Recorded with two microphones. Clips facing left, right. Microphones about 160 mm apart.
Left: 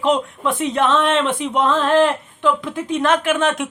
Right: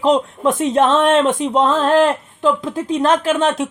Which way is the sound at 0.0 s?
40° right (ahead or behind).